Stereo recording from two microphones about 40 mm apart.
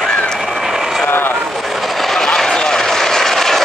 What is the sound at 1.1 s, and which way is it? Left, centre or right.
Vehicle, left.